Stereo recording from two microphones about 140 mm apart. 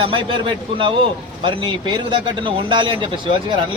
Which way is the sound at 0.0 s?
35° right (ahead or behind).